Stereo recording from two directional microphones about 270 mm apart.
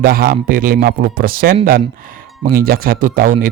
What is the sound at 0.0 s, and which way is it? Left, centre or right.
Speech, right.